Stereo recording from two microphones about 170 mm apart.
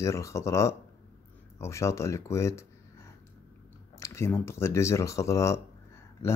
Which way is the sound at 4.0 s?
15° left (ahead or behind).